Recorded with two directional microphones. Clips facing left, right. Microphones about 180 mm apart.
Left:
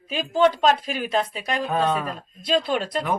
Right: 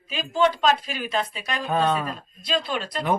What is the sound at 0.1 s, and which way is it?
A woman's voice, 50° left (ahead or behind).